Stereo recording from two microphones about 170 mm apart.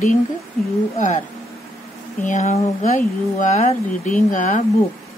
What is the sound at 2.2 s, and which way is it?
Speech, 45° left (ahead or behind).